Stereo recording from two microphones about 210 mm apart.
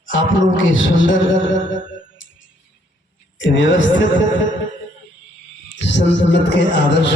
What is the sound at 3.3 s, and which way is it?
Speech, 60° left (ahead or behind).